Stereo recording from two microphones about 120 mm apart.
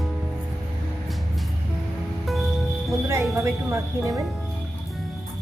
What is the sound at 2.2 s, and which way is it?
Music, centre (ahead or behind).